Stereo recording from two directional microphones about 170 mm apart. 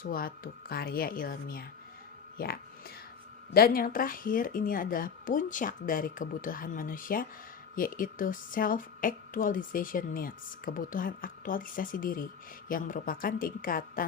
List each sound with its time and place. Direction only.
0.0 s a woman's voice: 60° left (ahead or behind)
3.5 s a woman's voice: 60° left (ahead or behind)